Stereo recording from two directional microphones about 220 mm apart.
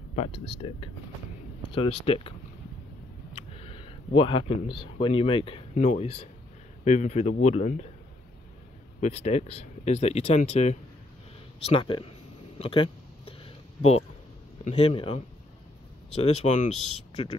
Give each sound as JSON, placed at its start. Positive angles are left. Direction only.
{"t": 0.6, "sound": "speech", "side_deg": 20}
{"t": 2.0, "sound": "speech", "side_deg": 25}
{"t": 3.5, "sound": "speech", "side_deg": 25}
{"t": 9.0, "sound": "speech", "side_deg": 30}
{"t": 12.5, "sound": "a sound", "side_deg": 25}
{"t": 14.6, "sound": "speech", "side_deg": 25}